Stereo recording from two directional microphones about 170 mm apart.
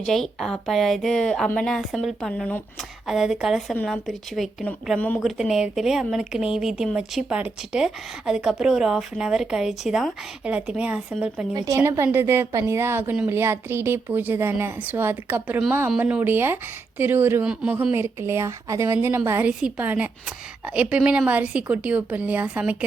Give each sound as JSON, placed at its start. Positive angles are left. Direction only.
{"t": 0.0, "sound": "speech", "side_deg": 0}
{"t": 5.2, "sound": "speech", "side_deg": 0}
{"t": 11.5, "sound": "a woman's voice", "side_deg": -20}